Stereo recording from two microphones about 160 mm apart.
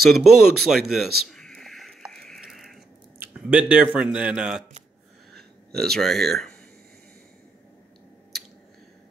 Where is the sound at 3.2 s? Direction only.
10° right (ahead or behind).